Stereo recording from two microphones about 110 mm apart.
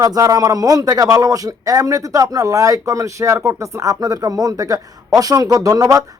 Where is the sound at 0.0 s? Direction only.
35° right (ahead or behind).